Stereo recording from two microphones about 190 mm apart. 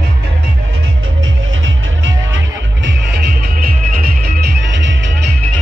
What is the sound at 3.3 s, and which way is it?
Music, 50° right (ahead or behind).